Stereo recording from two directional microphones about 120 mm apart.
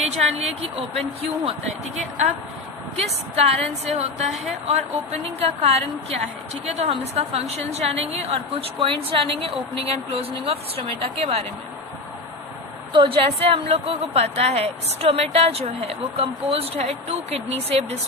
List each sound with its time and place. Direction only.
0.1 s speech: 70° right (ahead or behind)
3.0 s a woman's voice: 60° right (ahead or behind)
12.9 s a woman's voice: 45° right (ahead or behind)